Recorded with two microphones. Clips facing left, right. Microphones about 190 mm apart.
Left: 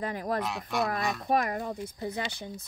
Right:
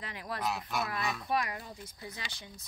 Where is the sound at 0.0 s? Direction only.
45° left (ahead or behind).